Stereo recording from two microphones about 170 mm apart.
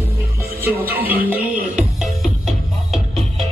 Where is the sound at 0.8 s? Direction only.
10° right (ahead or behind).